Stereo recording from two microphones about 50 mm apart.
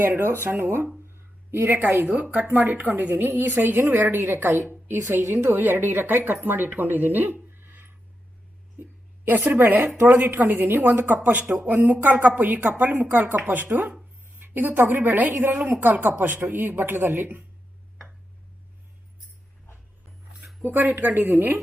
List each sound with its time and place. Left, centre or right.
0.0 s a woman's voice: right
4.0 s a woman's voice: right
8.8 s a sound: right
10.2 s a woman's voice: right
11.7 s a woman's voice: right
20.6 s a woman's voice: right